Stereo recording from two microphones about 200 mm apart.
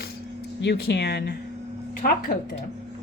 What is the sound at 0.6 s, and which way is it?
Speech, 60° left (ahead or behind).